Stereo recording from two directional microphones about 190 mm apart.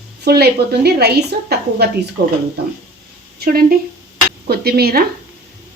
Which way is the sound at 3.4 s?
50° right (ahead or behind).